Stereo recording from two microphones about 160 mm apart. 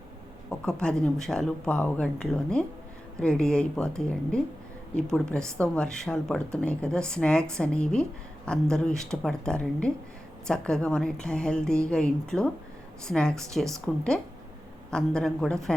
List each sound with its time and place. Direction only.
0.6 s speech: 5° left (ahead or behind)